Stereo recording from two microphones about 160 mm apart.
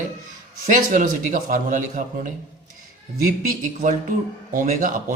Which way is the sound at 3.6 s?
55° right (ahead or behind).